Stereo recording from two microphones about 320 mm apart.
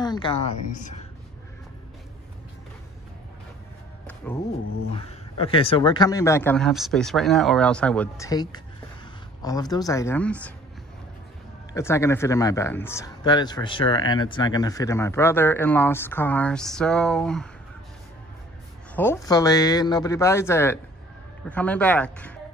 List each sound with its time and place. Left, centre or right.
0.0 s speech: centre
4.9 s speech: centre
11.7 s speech: centre
18.9 s speech: centre